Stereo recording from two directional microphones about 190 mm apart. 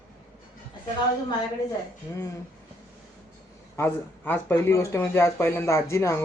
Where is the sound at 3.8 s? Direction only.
10° left (ahead or behind).